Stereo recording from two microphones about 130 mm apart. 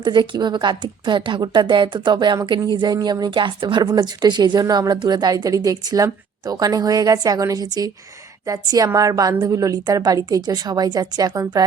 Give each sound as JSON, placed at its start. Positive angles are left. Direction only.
{"t": 0.0, "sound": "a woman's voice", "side_deg": -35}